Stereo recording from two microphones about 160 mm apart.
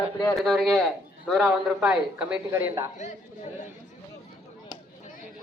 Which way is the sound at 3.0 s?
50° left (ahead or behind).